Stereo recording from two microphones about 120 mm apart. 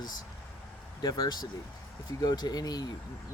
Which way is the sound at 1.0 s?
35° left (ahead or behind).